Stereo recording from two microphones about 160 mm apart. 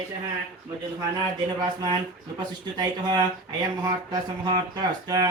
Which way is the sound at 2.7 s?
25° right (ahead or behind).